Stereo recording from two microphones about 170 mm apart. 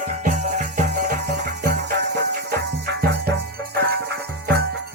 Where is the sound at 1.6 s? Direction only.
75° right (ahead or behind).